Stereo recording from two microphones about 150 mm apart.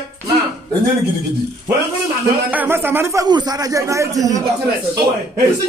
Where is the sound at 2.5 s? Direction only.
15° right (ahead or behind).